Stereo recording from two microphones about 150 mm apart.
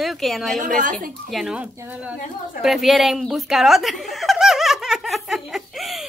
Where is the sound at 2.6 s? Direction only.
Centre (ahead or behind).